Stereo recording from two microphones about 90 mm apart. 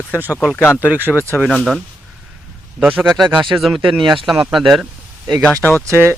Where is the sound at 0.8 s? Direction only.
20° right (ahead or behind).